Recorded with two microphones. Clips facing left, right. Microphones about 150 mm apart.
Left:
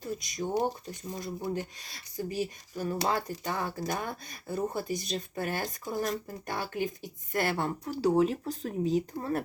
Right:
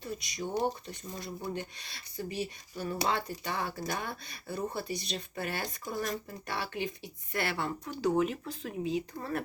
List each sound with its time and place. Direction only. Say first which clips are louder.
0.0 s speech: left 3 dB; 45° left (ahead or behind)